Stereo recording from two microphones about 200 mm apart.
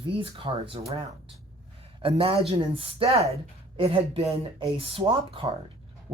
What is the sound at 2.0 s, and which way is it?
Speech, 30° right (ahead or behind).